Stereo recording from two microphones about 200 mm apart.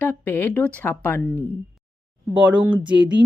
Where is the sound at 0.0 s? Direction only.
10° left (ahead or behind); by 2.6 s 10° right (ahead or behind).